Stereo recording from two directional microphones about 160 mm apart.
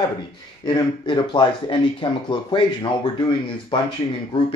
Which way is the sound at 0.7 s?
30° left (ahead or behind).